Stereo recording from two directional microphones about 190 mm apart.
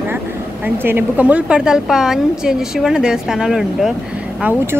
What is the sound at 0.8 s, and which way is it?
A woman's voice, 10° right (ahead or behind).